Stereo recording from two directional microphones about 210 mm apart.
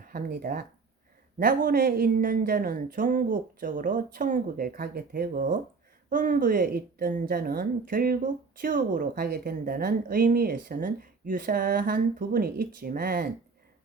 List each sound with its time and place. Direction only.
0.0 s a woman's voice: 45° right (ahead or behind)